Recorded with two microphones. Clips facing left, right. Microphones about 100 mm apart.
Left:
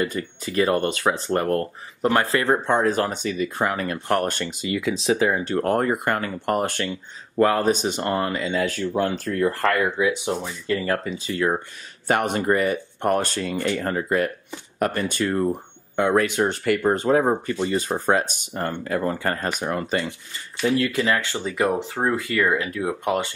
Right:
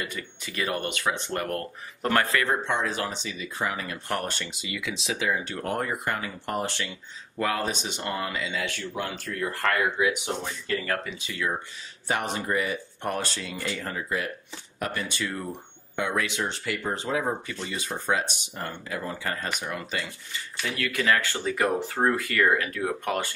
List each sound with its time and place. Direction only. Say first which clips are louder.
0.0 s speech: left 9 dB; 35° left (ahead or behind); by 4.3 s 60° left (ahead or behind)
4.3 s speech: left 8 dB; 45° left (ahead or behind)
12.1 s speech: left 7 dB; 55° left (ahead or behind)
20.6 s speech: left 6 dB; 25° left (ahead or behind)